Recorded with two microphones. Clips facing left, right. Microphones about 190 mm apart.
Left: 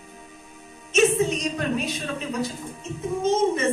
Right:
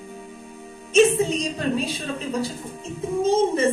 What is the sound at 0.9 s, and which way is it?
A woman's voice, 30° right (ahead or behind).